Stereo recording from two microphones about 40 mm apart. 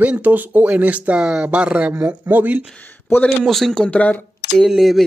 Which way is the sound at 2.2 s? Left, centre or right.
Right.